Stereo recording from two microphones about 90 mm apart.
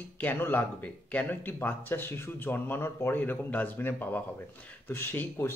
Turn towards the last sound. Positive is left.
turn(degrees=25)  # may be behind; listen again after turning